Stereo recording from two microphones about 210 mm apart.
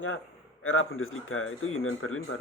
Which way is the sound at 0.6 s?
75° left (ahead or behind).